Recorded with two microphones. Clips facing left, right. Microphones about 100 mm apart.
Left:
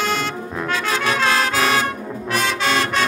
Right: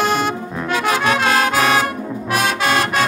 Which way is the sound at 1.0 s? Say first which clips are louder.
Right 1 dB; 60° right (ahead or behind).